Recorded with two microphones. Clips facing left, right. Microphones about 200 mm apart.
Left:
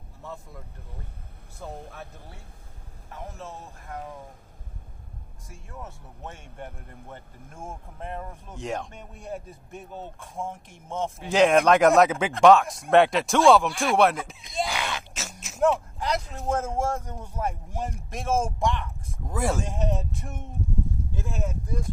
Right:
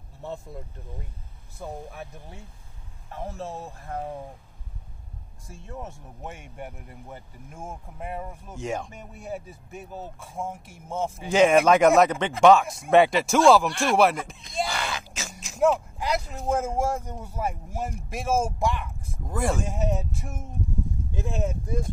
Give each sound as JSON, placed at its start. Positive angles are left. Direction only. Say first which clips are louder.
{"t": 0.2, "sound": "speech", "louder": "right 5 dB", "side_deg": -25}
{"t": 1.6, "sound": "speech", "louder": "right 2 dB", "side_deg": -15}
{"t": 3.1, "sound": "speech", "louder": "right 5 dB", "side_deg": -30}
{"t": 5.5, "sound": "speech", "louder": "right 4 dB", "side_deg": -25}
{"t": 21.1, "sound": "speech", "louder": "right 3 dB", "side_deg": -20}